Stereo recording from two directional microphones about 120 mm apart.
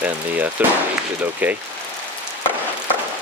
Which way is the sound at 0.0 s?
15° right (ahead or behind).